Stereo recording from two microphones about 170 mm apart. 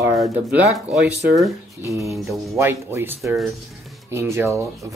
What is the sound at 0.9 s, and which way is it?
Speech, 5° right (ahead or behind).